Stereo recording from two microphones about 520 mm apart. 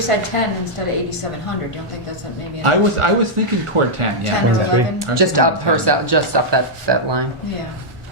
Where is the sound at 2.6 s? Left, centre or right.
Right.